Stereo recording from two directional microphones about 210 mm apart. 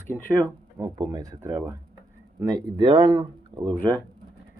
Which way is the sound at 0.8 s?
20° right (ahead or behind).